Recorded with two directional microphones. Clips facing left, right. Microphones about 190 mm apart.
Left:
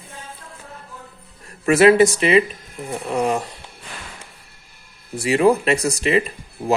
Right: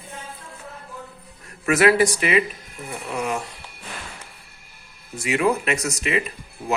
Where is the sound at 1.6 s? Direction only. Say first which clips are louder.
Left 5 dB; 30° left (ahead or behind).